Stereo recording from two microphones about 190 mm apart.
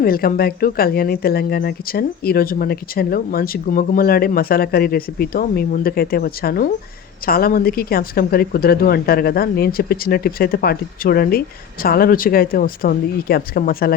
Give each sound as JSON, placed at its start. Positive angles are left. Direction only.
{"t": 0.0, "sound": "speech", "side_deg": 50}